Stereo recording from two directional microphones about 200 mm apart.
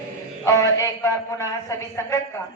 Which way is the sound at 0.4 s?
15° left (ahead or behind).